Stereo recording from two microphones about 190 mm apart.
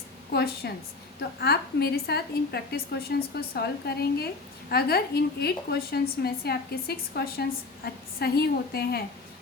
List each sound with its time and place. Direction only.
0.3 s a woman's voice: 60° left (ahead or behind)